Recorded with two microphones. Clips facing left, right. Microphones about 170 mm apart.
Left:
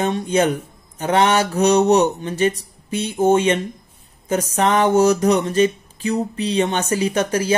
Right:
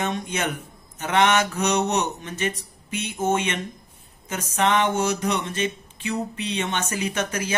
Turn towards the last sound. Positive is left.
turn(degrees=35)  # may be behind; listen again after turning